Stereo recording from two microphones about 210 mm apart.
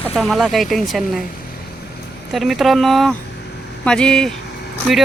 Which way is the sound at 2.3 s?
Centre (ahead or behind).